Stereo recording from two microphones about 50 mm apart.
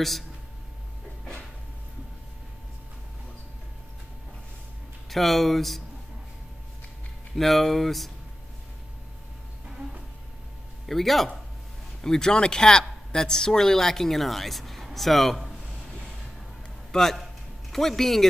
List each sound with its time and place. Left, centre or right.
5.1 s speech: centre
7.3 s speech: centre
10.9 s a woman's voice: centre
16.9 s a sound: centre